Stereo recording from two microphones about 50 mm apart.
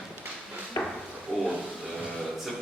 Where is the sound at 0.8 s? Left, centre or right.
Left.